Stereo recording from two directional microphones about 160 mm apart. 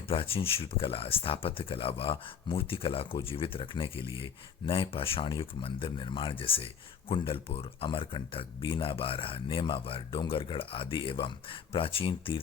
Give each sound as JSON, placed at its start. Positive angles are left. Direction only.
{"t": 0.1, "sound": "speech", "side_deg": 35}